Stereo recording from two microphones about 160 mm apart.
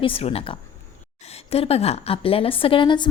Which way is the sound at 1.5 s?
40° left (ahead or behind).